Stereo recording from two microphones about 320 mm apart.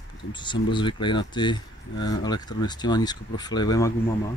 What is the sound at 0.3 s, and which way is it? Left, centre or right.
Speech, centre.